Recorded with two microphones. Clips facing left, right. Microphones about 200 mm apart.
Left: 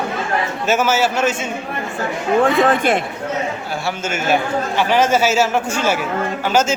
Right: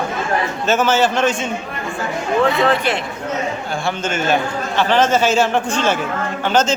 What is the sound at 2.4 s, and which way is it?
Speech, 50° left (ahead or behind).